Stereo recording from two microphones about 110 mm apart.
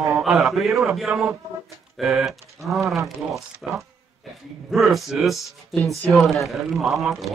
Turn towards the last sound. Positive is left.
turn(degrees=0)  # may be behind; listen again after turning